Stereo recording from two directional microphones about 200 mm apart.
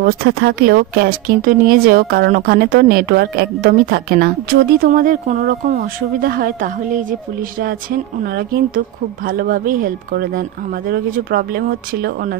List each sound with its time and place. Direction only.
0.0 s speech: 50° right (ahead or behind)